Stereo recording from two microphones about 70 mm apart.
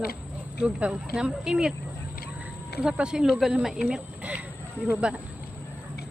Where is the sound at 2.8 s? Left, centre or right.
Centre.